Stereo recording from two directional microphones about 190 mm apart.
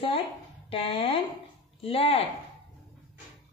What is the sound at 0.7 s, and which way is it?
Speech, 30° left (ahead or behind).